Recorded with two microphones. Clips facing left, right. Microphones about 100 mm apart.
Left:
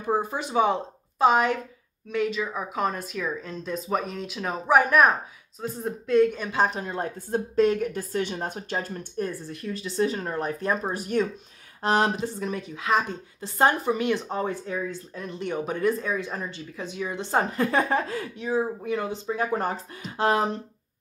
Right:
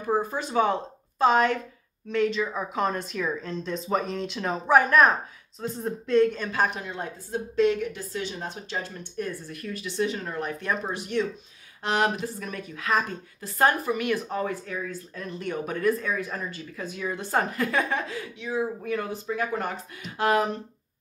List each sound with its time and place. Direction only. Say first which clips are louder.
0.0 s speech: even; 15° left (ahead or behind)
6.6 s a woman's voice: left 3 dB; 35° left (ahead or behind)
9.5 s speech: left 2 dB; 30° left (ahead or behind)
18.8 s speech: left 1 dB; 20° left (ahead or behind)